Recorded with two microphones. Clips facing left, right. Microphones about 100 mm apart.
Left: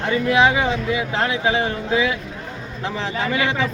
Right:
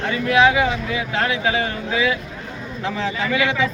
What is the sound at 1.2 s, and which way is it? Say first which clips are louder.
Speech: right 1 dB; 25° left (ahead or behind).